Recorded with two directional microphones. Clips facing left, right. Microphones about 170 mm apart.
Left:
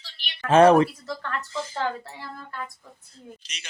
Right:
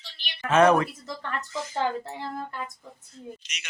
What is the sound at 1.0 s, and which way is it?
Speech, 20° right (ahead or behind).